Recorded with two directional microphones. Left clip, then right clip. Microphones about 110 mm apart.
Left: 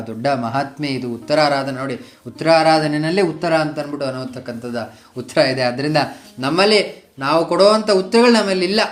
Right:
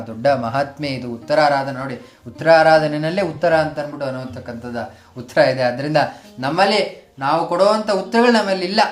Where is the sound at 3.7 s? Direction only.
25° left (ahead or behind).